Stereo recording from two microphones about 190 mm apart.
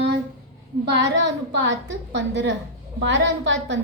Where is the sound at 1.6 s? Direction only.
70° right (ahead or behind).